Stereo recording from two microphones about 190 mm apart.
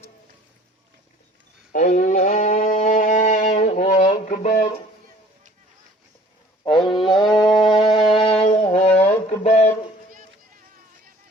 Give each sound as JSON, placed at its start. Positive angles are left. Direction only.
{"t": 1.7, "sound": "music", "side_deg": 45}
{"t": 6.7, "sound": "wild animals", "side_deg": 25}
{"t": 7.3, "sound": "music", "side_deg": 20}